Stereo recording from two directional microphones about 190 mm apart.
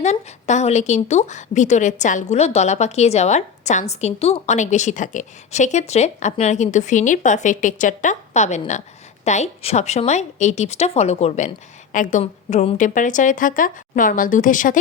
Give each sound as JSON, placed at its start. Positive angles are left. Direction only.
{"t": 0.0, "sound": "a woman's voice", "side_deg": 40}